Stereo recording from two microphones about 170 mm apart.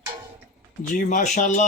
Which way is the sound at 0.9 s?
50° left (ahead or behind).